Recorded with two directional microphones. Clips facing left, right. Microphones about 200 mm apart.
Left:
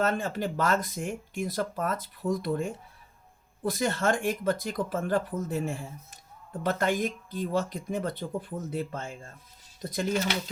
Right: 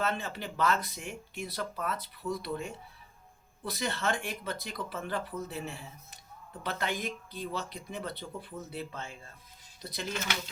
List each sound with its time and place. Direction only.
0.0 s speech: 45° left (ahead or behind)